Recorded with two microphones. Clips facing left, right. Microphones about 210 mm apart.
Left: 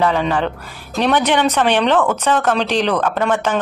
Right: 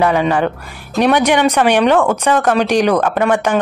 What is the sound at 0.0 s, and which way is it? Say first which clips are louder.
Speech: right 3 dB; 10° right (ahead or behind).